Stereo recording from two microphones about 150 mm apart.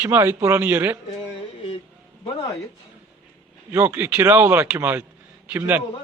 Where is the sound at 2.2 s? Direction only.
25° left (ahead or behind).